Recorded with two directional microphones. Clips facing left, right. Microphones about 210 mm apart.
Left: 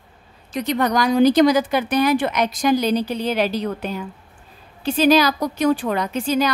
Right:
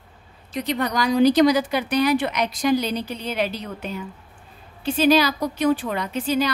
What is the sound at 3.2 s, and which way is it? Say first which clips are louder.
Speech: left 5 dB; 90° left.